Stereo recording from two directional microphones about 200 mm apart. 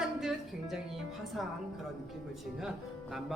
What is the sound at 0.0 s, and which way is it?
Music, centre (ahead or behind).